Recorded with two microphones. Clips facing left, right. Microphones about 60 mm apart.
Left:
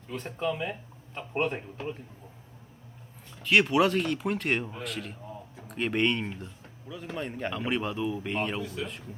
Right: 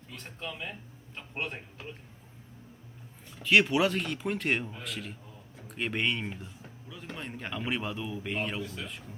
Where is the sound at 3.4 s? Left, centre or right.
Centre.